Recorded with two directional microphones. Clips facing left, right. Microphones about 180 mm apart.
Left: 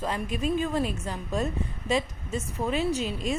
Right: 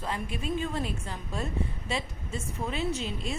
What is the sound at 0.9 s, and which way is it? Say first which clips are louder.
Speech: left 4 dB; 40° left (ahead or behind).